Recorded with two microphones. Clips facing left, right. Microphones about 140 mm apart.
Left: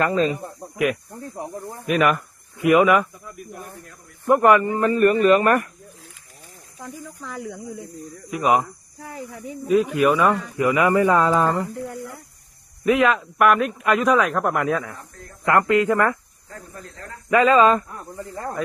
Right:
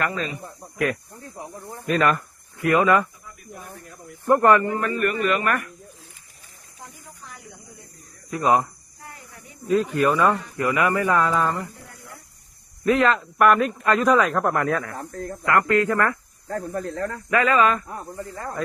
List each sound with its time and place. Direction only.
0.0 s speech: 30° left (ahead or behind)
1.9 s speech: 10° left (ahead or behind)
4.7 s speech: 30° left (ahead or behind)
8.3 s speech: 15° left (ahead or behind)
9.6 s speech: 10° left (ahead or behind); by 11.6 s 30° left (ahead or behind)
12.8 s a man's voice: 5° left (ahead or behind)
14.6 s speech: 15° left (ahead or behind)
14.9 s speech: 45° right (ahead or behind)
15.4 s speech: 20° left (ahead or behind)
16.5 s speech: 55° right (ahead or behind)
17.2 s speech: 20° left (ahead or behind)